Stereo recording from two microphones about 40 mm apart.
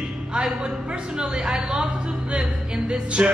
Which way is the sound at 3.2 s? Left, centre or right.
Right.